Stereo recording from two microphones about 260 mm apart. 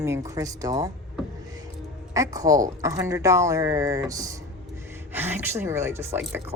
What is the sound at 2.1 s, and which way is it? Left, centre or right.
Speech, centre.